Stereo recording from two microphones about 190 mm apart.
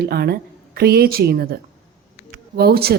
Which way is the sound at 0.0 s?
55° right (ahead or behind).